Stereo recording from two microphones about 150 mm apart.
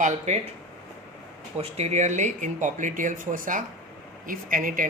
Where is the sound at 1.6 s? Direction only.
45° right (ahead or behind).